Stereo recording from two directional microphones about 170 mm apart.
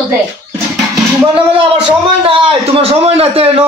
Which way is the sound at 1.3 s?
30° right (ahead or behind).